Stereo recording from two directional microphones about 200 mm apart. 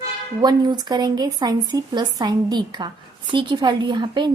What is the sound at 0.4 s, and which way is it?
Speech, 20° right (ahead or behind).